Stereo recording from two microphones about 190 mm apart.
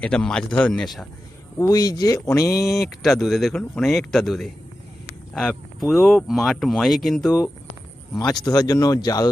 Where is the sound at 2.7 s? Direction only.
Centre (ahead or behind).